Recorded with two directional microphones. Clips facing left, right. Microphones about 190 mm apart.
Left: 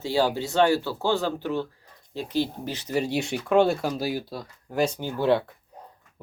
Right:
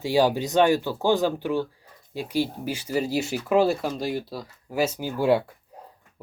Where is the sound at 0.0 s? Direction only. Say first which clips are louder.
Right 3 dB; 15° right (ahead or behind).